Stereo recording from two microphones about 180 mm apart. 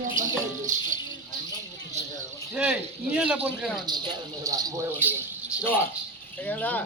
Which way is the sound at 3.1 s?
10° right (ahead or behind).